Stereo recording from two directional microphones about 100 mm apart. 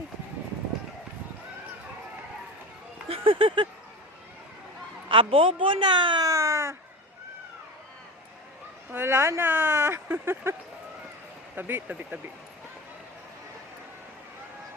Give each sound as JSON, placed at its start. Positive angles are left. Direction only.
{"t": 3.1, "sound": "speech", "side_deg": -65}
{"t": 5.0, "sound": "a woman's voice", "side_deg": -60}
{"t": 6.2, "sound": "a sound", "side_deg": -30}
{"t": 8.9, "sound": "speech", "side_deg": -25}
{"t": 11.5, "sound": "speech", "side_deg": -20}